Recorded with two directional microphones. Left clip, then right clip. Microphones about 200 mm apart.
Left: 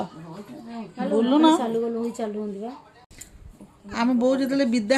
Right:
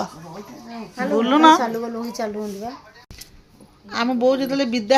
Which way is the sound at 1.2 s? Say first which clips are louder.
Right 6 dB; 10° left (ahead or behind).